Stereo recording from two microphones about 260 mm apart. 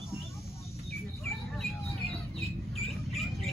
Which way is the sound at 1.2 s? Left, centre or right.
Centre.